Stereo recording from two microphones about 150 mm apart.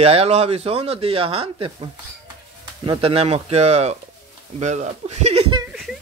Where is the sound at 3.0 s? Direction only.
45° right (ahead or behind).